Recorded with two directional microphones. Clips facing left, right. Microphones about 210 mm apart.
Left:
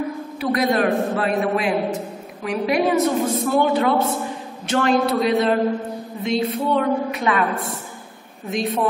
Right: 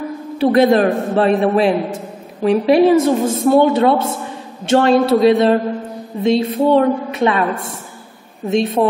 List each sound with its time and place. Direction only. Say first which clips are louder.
0.4 s a woman's voice: right 8 dB; 30° right (ahead or behind)